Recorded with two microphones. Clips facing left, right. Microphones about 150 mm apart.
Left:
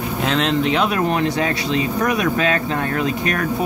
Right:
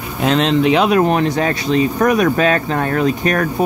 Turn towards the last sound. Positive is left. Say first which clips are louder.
# right 5 dB
turn(degrees=-45)  # may be behind; listen again after turning